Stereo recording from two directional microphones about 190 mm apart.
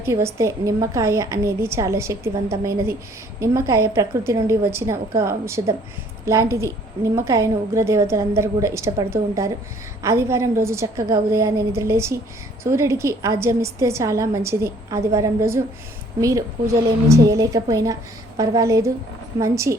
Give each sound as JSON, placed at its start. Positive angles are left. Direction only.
{"t": 0.0, "sound": "a woman's voice", "side_deg": -15}